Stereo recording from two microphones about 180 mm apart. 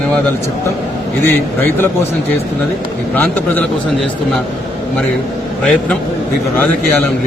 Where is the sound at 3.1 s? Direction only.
10° left (ahead or behind).